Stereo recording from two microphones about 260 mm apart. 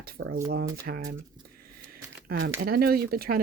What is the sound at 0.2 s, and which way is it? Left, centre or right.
Speech, right.